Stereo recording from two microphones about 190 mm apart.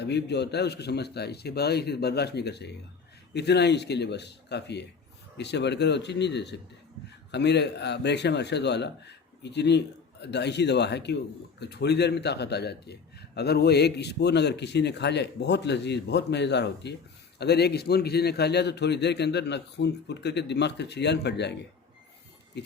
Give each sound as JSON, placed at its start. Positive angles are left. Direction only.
{"t": 0.0, "sound": "a man's voice", "side_deg": 65}